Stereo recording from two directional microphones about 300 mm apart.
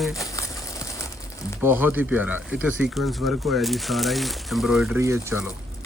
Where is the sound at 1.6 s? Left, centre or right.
Centre.